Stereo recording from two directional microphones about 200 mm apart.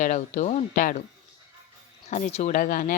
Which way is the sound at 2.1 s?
35° left (ahead or behind).